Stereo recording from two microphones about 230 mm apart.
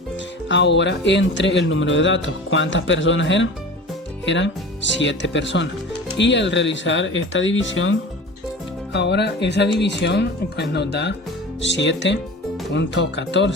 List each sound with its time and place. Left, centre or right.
0.4 s speech: left